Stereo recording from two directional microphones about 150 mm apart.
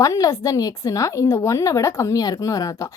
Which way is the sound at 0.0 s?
20° left (ahead or behind).